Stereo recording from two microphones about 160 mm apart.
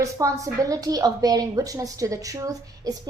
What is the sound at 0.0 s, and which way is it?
A woman's voice, 20° right (ahead or behind).